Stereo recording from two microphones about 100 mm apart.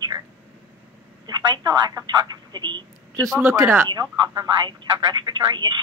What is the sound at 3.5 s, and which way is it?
Speech, 30° right (ahead or behind).